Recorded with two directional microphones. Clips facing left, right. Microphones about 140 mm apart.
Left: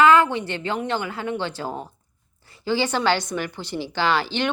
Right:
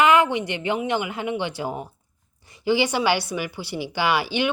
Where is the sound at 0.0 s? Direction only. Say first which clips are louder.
Left 1 dB; 15° right (ahead or behind).